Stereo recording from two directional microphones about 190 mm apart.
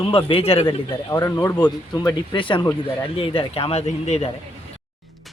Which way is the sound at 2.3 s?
25° left (ahead or behind).